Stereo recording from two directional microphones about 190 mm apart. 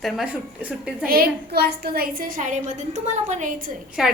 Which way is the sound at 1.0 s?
50° right (ahead or behind).